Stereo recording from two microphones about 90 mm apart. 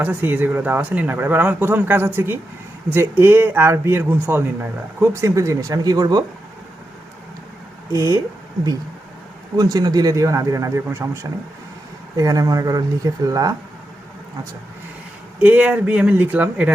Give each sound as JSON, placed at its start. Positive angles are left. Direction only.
{"t": 0.0, "sound": "speech", "side_deg": -20}
{"t": 5.2, "sound": "speech", "side_deg": -35}
{"t": 7.9, "sound": "speech", "side_deg": -40}
{"t": 9.6, "sound": "speech", "side_deg": -45}
{"t": 15.4, "sound": "speech", "side_deg": -20}